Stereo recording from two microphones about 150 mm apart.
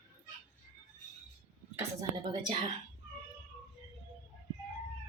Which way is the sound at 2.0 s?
30° right (ahead or behind).